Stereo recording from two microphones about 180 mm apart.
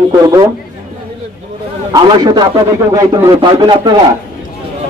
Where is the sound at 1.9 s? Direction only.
20° right (ahead or behind).